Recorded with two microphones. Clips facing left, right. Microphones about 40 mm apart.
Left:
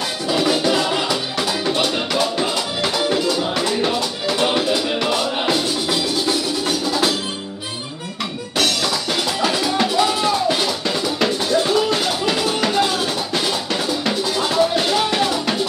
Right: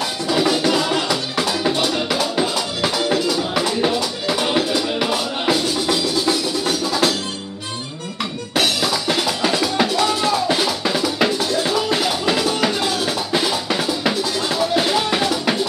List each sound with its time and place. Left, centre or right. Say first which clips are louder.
0.3 s music: even; centre
3.5 s music: right 1 dB; centre
8.5 s music: right 1 dB; centre
13.3 s drum: right 1 dB; centre